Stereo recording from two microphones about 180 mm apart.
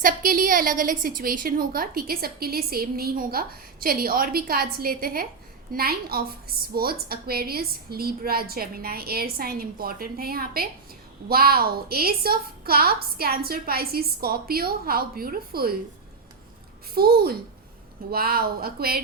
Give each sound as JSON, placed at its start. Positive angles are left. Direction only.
{"t": 0.0, "sound": "a woman's voice", "side_deg": -50}
{"t": 16.9, "sound": "a woman's voice", "side_deg": -60}